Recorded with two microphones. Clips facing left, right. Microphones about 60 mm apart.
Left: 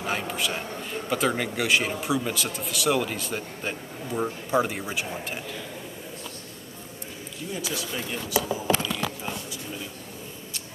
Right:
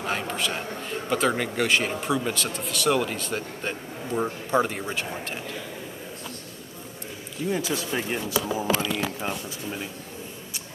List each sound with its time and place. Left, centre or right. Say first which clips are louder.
0.0 s a man's voice: right 1 dB; centre
7.4 s speech: right 5 dB; right